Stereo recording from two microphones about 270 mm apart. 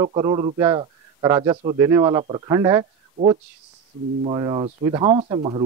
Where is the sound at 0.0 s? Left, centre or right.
Centre.